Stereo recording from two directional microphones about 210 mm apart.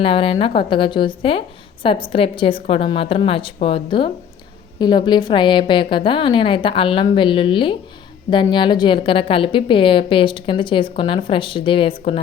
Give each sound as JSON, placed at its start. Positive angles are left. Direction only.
{"t": 0.0, "sound": "a woman's voice", "side_deg": 25}